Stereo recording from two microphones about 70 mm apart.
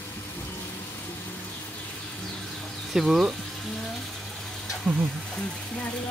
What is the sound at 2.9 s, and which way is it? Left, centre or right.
Speech, centre.